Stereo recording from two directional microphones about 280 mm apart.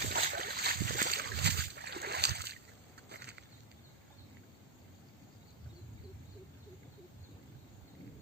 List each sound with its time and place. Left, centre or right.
0.0 s boat: right
3.1 s vehicle: right